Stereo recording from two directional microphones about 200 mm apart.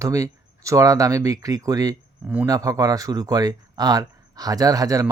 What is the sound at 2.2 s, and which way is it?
Speech, 5° right (ahead or behind).